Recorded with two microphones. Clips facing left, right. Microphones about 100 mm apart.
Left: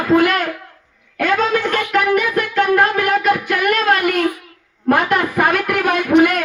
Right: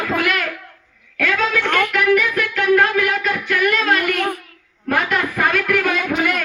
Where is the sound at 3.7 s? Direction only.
50° left (ahead or behind).